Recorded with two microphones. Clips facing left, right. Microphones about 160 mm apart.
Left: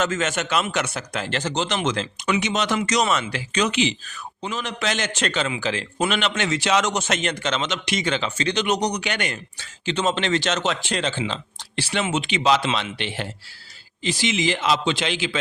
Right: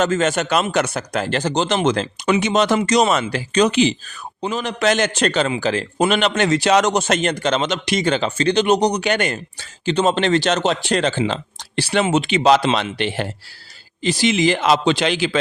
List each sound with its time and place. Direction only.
0.0 s a man's voice: 35° right (ahead or behind)
4.8 s speech: 55° right (ahead or behind)
5.1 s a man's voice: 40° right (ahead or behind)